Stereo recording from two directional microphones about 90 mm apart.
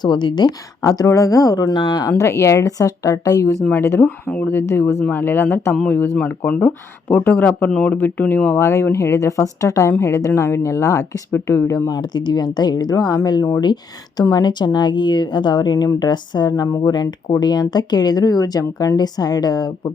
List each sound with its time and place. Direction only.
0.0 s speech: 55° left (ahead or behind)
0.9 s speech: 35° left (ahead or behind)
3.7 s speech: 25° left (ahead or behind)
4.6 s speech: 30° left (ahead or behind)
5.7 s speech: 15° left (ahead or behind)
8.5 s speech: 30° left (ahead or behind)
11.9 s speech: 50° left (ahead or behind)
16.9 s speech: 50° left (ahead or behind)